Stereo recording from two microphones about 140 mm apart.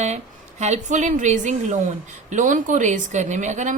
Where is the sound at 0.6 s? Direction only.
55° right (ahead or behind).